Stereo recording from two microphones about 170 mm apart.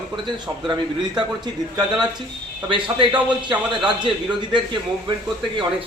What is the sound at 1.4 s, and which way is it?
A man's voice, 25° right (ahead or behind).